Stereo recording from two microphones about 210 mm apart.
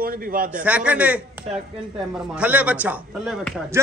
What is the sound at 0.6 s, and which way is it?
Speech, 5° right (ahead or behind).